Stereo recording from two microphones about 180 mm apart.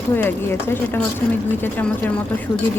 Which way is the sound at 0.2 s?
10° left (ahead or behind).